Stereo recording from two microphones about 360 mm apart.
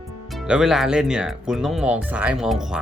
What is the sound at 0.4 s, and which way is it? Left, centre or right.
Speech, centre.